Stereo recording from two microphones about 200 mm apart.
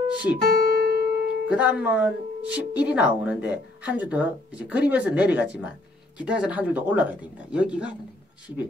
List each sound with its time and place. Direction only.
0.1 s speech: 5° right (ahead or behind)
0.7 s music: 50° right (ahead or behind)
1.5 s speech: 5° right (ahead or behind)